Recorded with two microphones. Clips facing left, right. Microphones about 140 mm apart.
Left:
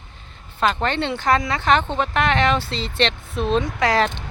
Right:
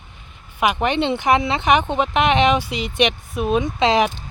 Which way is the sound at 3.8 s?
20° right (ahead or behind).